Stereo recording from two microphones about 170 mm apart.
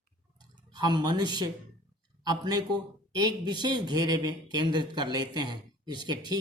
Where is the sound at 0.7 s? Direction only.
25° right (ahead or behind).